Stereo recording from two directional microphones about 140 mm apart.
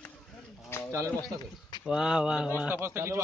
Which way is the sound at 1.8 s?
5° right (ahead or behind).